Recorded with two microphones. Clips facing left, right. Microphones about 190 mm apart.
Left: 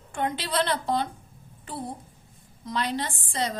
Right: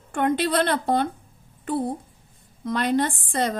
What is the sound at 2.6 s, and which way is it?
Speech, 55° right (ahead or behind).